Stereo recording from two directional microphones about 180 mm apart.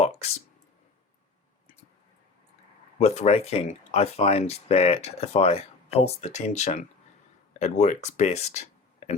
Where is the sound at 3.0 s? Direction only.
40° left (ahead or behind).